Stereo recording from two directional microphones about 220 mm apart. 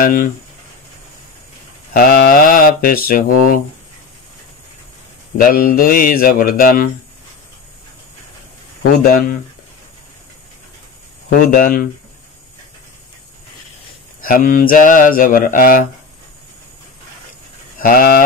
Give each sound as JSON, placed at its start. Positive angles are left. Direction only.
{"t": 0.0, "sound": "mantra", "side_deg": 40}
{"t": 2.0, "sound": "mantra", "side_deg": 40}
{"t": 5.4, "sound": "mantra", "side_deg": 40}
{"t": 11.2, "sound": "mantra", "side_deg": 40}
{"t": 14.2, "sound": "mantra", "side_deg": 40}
{"t": 17.7, "sound": "speech", "side_deg": 40}